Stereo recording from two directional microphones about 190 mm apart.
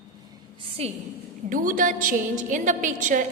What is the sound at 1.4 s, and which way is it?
A woman's voice, 45° right (ahead or behind).